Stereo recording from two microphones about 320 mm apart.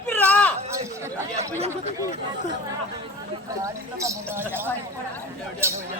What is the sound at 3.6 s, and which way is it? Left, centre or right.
Speech, centre.